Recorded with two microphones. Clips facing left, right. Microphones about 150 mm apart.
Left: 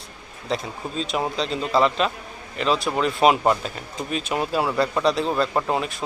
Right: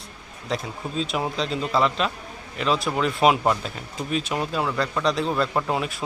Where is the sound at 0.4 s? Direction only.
Centre (ahead or behind).